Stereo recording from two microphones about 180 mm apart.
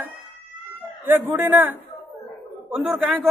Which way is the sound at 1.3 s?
10° right (ahead or behind).